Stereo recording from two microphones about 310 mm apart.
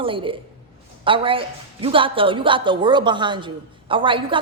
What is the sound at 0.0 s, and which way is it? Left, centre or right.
A woman's voice, centre.